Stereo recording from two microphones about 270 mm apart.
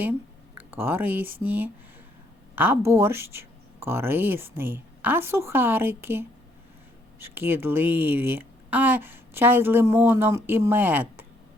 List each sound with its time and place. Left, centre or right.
0.5 s speech: centre